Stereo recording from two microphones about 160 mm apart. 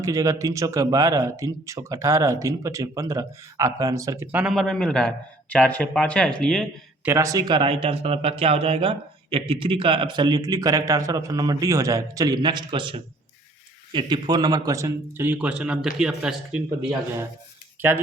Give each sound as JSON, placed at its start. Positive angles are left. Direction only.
{"t": 0.0, "sound": "speech", "side_deg": -20}
{"t": 7.0, "sound": "speech", "side_deg": -15}